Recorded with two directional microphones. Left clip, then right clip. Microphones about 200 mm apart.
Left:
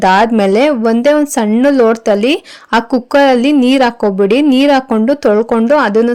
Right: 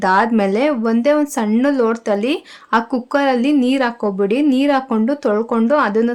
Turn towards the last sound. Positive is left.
turn(degrees=25)  # may be behind; listen again after turning